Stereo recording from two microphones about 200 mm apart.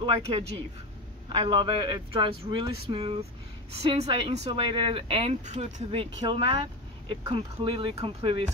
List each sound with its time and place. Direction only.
0.0 s speech: 25° right (ahead or behind)